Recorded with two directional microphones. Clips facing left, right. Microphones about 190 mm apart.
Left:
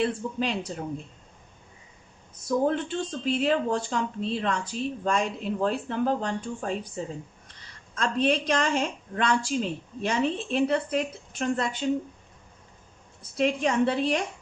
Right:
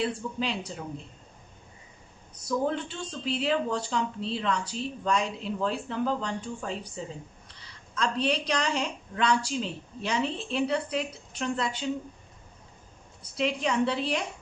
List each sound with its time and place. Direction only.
0.0 s a woman's voice: 45° left (ahead or behind)
2.5 s a woman's voice: 50° left (ahead or behind)
13.3 s a woman's voice: 50° left (ahead or behind)